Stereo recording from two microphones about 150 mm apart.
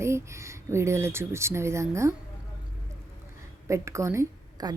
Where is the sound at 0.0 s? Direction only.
20° right (ahead or behind).